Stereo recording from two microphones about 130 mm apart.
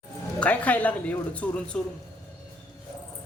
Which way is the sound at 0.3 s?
10° left (ahead or behind).